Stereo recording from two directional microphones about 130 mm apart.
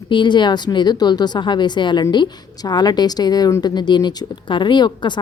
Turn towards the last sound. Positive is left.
turn(degrees=35)  # may be behind; listen again after turning